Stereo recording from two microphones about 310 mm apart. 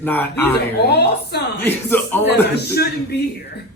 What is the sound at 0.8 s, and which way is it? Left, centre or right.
Speech, left.